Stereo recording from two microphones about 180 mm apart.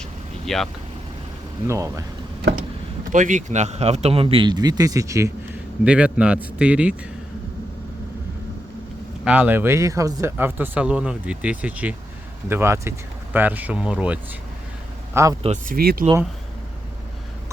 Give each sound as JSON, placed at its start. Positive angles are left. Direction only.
{"t": 0.4, "sound": "speech", "side_deg": 0}
{"t": 1.6, "sound": "speech", "side_deg": -15}
{"t": 3.1, "sound": "speech", "side_deg": -45}
{"t": 5.8, "sound": "speech", "side_deg": -5}
{"t": 9.2, "sound": "speech", "side_deg": -10}
{"t": 15.1, "sound": "speech", "side_deg": -15}
{"t": 15.6, "sound": "speech", "side_deg": -55}